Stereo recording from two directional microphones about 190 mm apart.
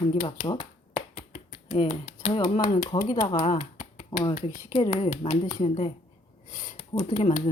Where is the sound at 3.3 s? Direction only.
35° left (ahead or behind).